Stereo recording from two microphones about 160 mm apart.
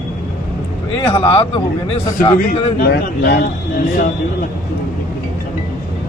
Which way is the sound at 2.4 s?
65° left (ahead or behind).